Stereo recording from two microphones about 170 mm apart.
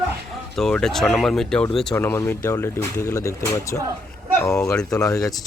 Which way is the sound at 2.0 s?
15° left (ahead or behind).